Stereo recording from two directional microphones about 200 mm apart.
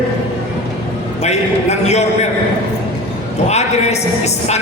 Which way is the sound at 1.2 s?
35° left (ahead or behind).